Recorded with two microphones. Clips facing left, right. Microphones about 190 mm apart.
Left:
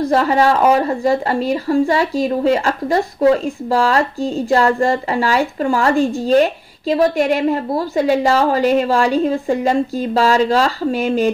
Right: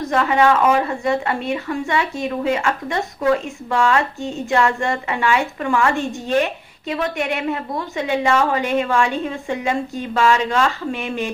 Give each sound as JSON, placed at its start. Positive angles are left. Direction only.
{"t": 0.0, "sound": "speech", "side_deg": 35}